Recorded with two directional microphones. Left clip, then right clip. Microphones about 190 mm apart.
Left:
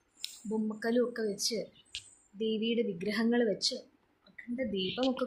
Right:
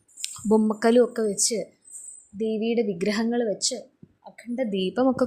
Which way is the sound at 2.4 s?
30° right (ahead or behind).